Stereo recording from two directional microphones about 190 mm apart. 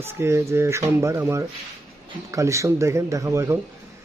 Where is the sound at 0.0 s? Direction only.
15° right (ahead or behind).